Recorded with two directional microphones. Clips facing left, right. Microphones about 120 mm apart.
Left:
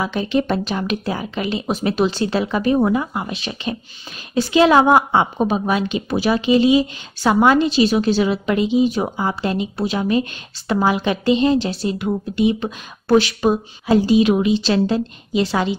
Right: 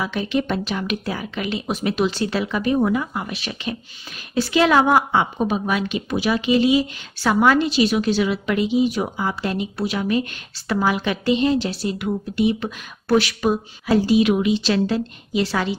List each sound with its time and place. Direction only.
0.0 s a woman's voice: 30° left (ahead or behind)